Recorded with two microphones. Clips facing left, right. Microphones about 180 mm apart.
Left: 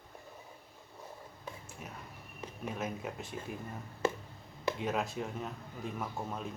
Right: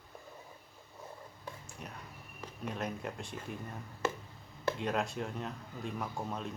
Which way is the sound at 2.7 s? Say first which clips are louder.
Even; 5° left (ahead or behind).